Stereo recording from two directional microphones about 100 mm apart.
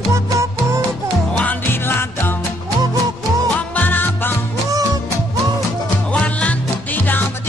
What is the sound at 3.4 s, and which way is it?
Music, 15° left (ahead or behind).